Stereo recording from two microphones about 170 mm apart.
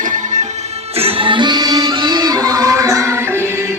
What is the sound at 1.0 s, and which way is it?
Music, 30° right (ahead or behind).